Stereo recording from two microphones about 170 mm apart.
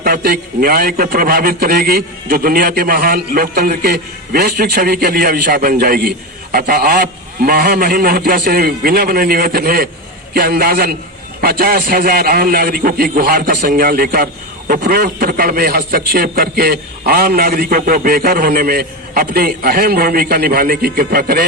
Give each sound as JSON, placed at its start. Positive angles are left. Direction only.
{"t": 0.0, "sound": "a man's voice", "side_deg": -60}